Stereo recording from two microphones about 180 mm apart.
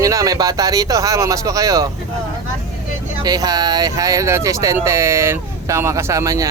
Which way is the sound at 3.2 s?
20° right (ahead or behind).